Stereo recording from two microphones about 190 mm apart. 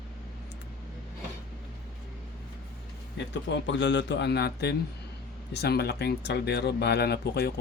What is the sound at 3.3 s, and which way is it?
Speech, 70° left (ahead or behind).